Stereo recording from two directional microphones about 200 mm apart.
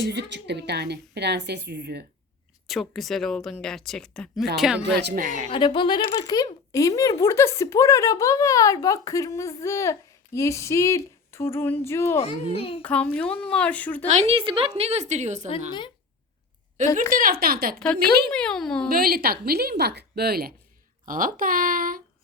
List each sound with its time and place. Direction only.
0.1 s a woman's voice: 60° right (ahead or behind)
2.6 s speech: centre (ahead or behind)
4.9 s a woman's voice: 55° right (ahead or behind)
5.5 s speech: 25° left (ahead or behind)
12.1 s a child's voice: 30° left (ahead or behind)
12.8 s speech: 5° left (ahead or behind)
14.1 s a woman's voice: 30° right (ahead or behind)
17.0 s a woman's voice: 45° right (ahead or behind)
18.3 s speech: 5° left (ahead or behind)
18.9 s a woman's voice: 50° right (ahead or behind)